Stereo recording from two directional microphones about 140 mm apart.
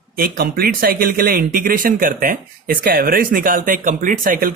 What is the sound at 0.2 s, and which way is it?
Speech, 90° right.